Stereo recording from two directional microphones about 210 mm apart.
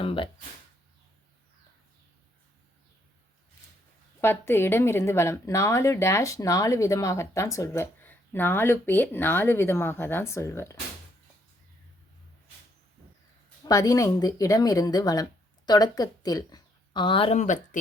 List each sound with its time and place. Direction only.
0.0 s speech: 25° left (ahead or behind)
4.2 s speech: 10° left (ahead or behind)
13.7 s speech: 15° left (ahead or behind); by 17.7 s 35° left (ahead or behind)